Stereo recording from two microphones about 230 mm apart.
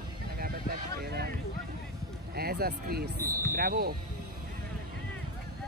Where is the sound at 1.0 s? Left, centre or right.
Right.